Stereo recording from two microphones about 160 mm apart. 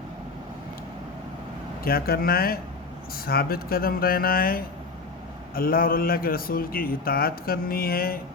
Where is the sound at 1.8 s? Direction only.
70° left (ahead or behind).